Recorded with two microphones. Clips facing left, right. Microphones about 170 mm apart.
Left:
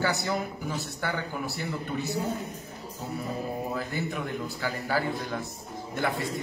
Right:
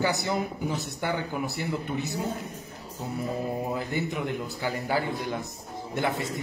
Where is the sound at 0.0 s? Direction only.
20° right (ahead or behind).